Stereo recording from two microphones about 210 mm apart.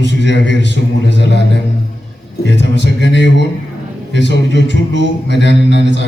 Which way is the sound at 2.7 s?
55° left (ahead or behind).